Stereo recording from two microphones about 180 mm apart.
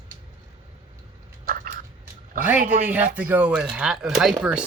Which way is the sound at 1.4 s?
50° right (ahead or behind).